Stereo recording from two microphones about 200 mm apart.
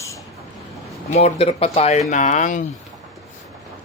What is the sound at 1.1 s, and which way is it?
Speech, 30° left (ahead or behind).